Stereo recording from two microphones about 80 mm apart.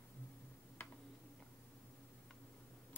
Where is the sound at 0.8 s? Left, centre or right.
Left.